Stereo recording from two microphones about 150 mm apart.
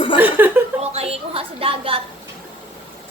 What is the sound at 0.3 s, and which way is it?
Chuckle, 10° right (ahead or behind).